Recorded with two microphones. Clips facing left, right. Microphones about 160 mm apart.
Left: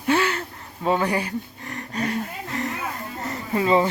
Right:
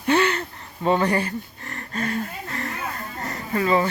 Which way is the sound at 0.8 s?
5° left (ahead or behind).